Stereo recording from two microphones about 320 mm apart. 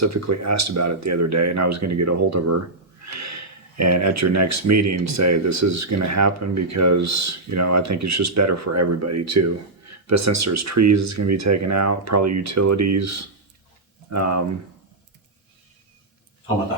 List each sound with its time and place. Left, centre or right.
0.0 s speech: right